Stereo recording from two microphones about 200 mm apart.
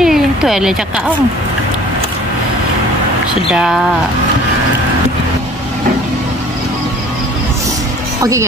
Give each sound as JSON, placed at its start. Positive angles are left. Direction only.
{"t": 0.0, "sound": "a sound", "side_deg": 0}
{"t": 3.5, "sound": "speech", "side_deg": 0}
{"t": 8.2, "sound": "a woman's voice", "side_deg": -15}